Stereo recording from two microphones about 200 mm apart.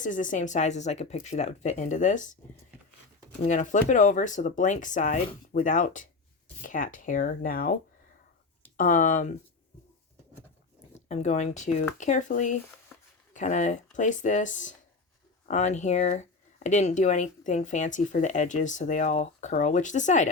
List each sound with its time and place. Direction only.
0.0 s speech: 40° left (ahead or behind)
3.4 s speech: 40° left (ahead or behind)
11.1 s speech: 35° left (ahead or behind)